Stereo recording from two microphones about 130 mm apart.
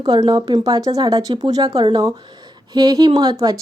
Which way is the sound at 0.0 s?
35° right (ahead or behind).